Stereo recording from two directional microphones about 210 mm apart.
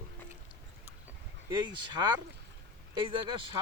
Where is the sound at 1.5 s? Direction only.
20° right (ahead or behind).